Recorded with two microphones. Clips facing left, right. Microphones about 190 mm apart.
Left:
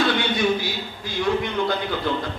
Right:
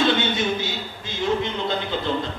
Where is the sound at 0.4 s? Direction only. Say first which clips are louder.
Left 3 dB; 25° right (ahead or behind).